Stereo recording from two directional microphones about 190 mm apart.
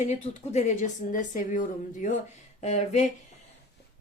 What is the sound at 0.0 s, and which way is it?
Speech, 35° left (ahead or behind).